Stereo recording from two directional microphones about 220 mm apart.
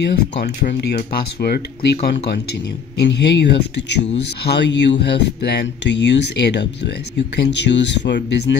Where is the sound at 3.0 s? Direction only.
50° left (ahead or behind).